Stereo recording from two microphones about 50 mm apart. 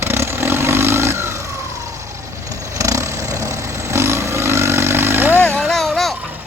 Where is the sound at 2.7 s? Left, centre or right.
Right.